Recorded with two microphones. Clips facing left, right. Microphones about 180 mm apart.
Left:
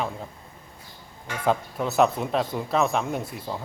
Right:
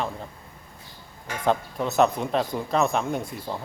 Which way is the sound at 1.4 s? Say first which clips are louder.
Even; 5° left (ahead or behind).